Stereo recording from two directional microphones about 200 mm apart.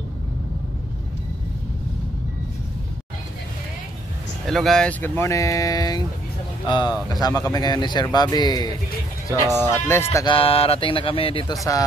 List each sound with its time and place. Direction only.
4.5 s speech: centre (ahead or behind)
10.1 s speech: 25° left (ahead or behind)